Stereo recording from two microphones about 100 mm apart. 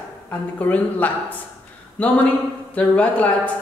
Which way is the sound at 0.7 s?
15° left (ahead or behind).